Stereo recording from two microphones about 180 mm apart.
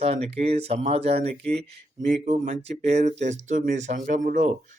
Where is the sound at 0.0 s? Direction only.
35° right (ahead or behind).